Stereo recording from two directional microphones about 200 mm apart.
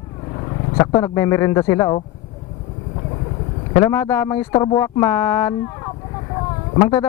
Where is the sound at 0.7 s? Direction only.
15° left (ahead or behind).